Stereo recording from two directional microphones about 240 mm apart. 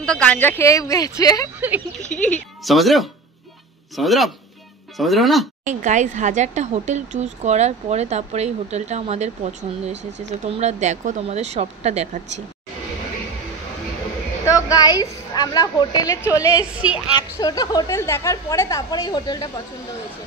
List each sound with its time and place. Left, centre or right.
0.0 s a woman's voice: centre
5.7 s speech: right
14.4 s a woman's voice: centre